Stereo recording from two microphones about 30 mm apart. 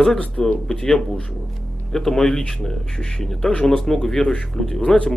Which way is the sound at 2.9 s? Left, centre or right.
Left.